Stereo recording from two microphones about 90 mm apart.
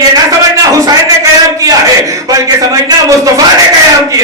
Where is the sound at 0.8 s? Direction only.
40° right (ahead or behind).